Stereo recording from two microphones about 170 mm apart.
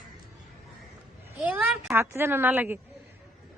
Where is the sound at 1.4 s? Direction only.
5° right (ahead or behind).